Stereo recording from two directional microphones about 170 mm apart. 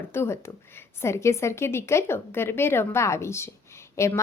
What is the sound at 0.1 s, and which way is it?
A woman's voice, 15° left (ahead or behind).